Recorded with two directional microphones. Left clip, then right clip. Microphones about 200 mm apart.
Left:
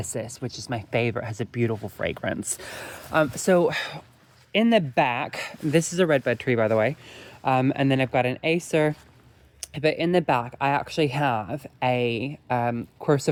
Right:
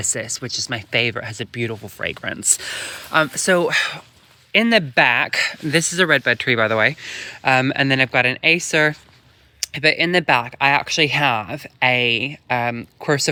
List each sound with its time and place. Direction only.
0.0 s speech: centre (ahead or behind)